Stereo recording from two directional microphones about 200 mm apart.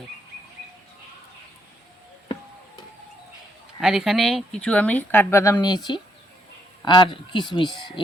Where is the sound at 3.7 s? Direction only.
Centre (ahead or behind).